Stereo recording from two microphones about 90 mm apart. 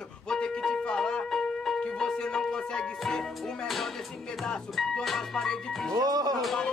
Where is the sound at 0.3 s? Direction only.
5° left (ahead or behind).